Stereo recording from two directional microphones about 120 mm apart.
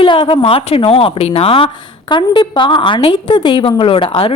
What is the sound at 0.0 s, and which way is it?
A woman's voice, 50° left (ahead or behind).